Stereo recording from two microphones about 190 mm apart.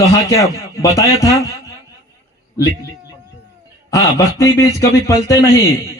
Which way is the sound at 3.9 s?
15° left (ahead or behind).